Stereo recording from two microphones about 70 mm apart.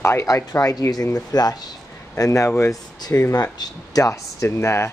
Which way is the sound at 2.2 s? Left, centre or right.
Left.